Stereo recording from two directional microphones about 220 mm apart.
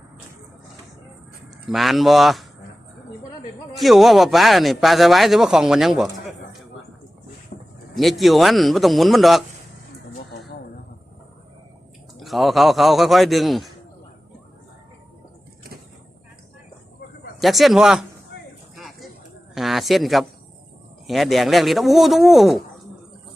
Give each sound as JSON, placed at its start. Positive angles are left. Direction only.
{"t": 1.7, "sound": "speech", "side_deg": 0}
{"t": 3.8, "sound": "speech", "side_deg": 0}
{"t": 7.5, "sound": "a sound", "side_deg": 35}
{"t": 7.9, "sound": "speech", "side_deg": 0}
{"t": 12.1, "sound": "speech", "side_deg": 0}
{"t": 17.4, "sound": "speech", "side_deg": 0}
{"t": 18.8, "sound": "a sound", "side_deg": 0}
{"t": 19.5, "sound": "speech", "side_deg": 0}